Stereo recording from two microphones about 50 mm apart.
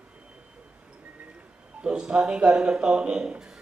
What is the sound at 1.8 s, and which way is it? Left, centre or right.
Speech, centre.